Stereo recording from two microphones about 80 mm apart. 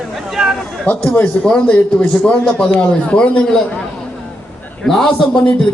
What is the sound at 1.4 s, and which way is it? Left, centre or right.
A man's voice, centre.